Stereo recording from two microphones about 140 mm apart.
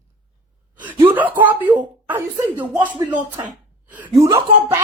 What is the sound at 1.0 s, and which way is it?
Speech, 10° right (ahead or behind).